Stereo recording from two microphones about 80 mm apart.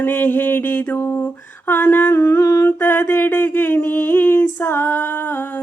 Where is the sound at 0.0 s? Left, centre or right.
Left.